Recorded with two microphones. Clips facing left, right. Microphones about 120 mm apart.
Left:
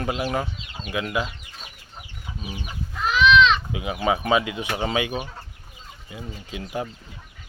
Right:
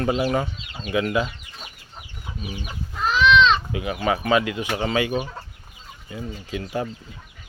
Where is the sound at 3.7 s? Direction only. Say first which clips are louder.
Even; 15° left (ahead or behind).